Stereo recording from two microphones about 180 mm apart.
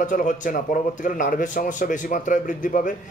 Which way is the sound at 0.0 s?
45° left (ahead or behind).